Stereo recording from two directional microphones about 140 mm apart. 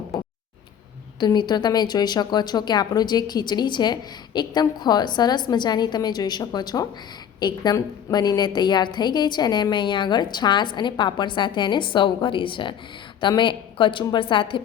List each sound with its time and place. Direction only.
1.2 s a woman's voice: 30° left (ahead or behind)